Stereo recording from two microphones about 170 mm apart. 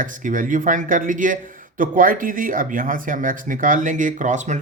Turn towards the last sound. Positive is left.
turn(degrees=-45)  # may be behind; listen again after turning